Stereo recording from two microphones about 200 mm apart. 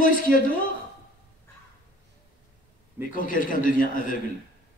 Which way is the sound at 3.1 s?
45° left (ahead or behind).